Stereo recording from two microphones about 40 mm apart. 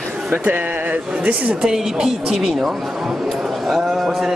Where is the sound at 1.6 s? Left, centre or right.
Centre.